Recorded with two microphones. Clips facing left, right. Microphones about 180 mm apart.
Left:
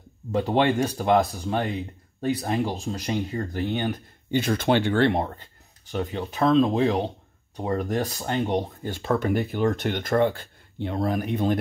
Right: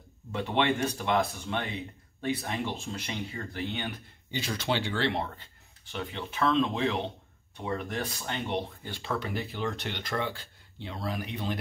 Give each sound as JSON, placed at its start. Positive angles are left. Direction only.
{"t": 0.3, "sound": "speech", "side_deg": 40}